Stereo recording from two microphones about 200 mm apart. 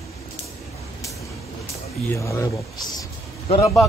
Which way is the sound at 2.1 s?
15° left (ahead or behind).